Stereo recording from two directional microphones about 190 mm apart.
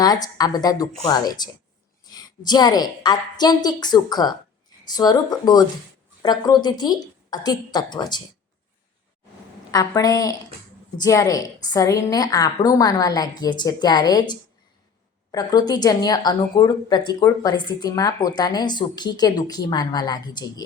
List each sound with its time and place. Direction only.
0.0 s speech: 20° left (ahead or behind)
9.7 s speech: 20° left (ahead or behind)